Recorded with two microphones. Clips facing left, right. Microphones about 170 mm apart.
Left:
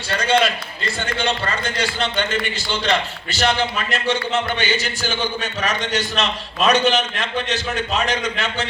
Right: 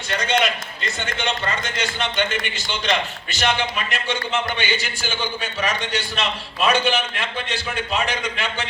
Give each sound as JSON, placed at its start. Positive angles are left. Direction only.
{"t": 0.4, "sound": "a man's voice", "side_deg": -20}